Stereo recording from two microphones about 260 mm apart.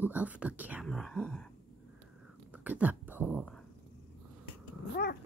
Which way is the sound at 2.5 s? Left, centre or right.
Centre.